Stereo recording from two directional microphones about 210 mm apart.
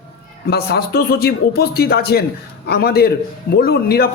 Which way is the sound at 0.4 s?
50° left (ahead or behind).